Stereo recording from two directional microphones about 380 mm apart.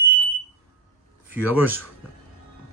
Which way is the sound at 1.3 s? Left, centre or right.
Centre.